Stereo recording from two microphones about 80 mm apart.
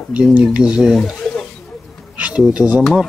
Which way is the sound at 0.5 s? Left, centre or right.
Centre.